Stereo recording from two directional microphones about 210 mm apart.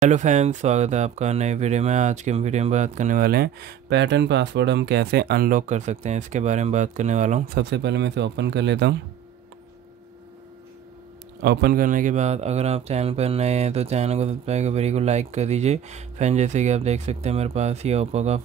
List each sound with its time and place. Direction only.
0.0 s speech: 35° right (ahead or behind)
7.5 s speech: 55° right (ahead or behind)
11.4 s speech: 50° right (ahead or behind); by 18.4 s 30° right (ahead or behind)